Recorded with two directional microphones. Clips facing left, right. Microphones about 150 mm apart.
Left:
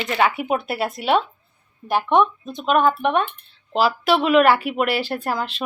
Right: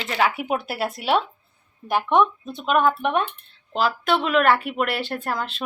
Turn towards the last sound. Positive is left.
turn(degrees=0)  # may be behind; listen again after turning